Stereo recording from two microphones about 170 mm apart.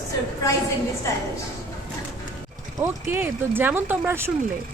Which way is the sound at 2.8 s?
15° right (ahead or behind).